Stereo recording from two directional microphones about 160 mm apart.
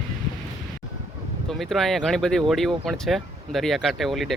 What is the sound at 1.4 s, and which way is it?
Speech, centre (ahead or behind).